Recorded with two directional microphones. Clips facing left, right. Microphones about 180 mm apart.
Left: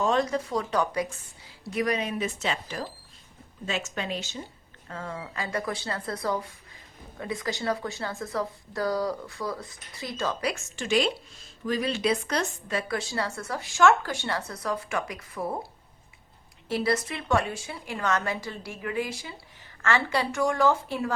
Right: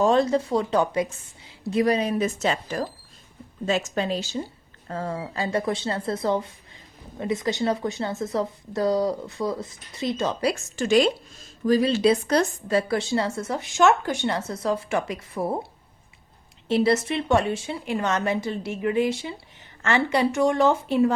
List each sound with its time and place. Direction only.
0.0 s speech: 30° right (ahead or behind)
10.5 s a woman's voice: 40° right (ahead or behind); by 15.5 s 25° right (ahead or behind)
16.6 s speech: 25° right (ahead or behind)